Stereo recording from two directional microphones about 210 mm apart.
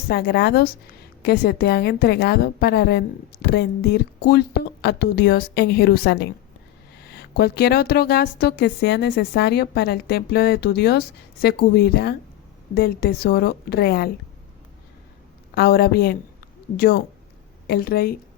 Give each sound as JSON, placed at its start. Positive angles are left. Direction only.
{"t": 0.1, "sound": "a woman's voice", "side_deg": 50}
{"t": 15.5, "sound": "a woman's voice", "side_deg": 50}